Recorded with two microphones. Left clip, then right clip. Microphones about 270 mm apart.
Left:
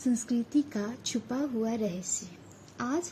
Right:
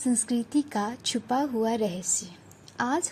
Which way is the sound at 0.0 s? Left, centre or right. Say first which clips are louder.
Right 3 dB; right.